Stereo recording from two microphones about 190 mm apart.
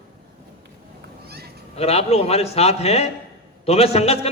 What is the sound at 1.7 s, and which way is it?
A man's voice, 35° left (ahead or behind).